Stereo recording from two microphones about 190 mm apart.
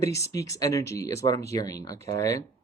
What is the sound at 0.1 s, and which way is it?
Speech, 15° left (ahead or behind).